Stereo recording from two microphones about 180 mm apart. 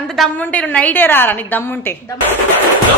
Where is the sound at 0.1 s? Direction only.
5° left (ahead or behind).